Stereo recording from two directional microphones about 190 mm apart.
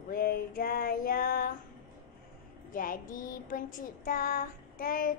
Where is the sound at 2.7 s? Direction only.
45° left (ahead or behind).